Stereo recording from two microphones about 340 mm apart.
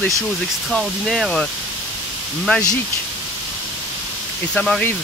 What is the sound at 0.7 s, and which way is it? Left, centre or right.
Speech, centre.